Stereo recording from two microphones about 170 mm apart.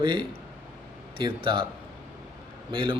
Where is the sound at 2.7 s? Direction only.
30° right (ahead or behind).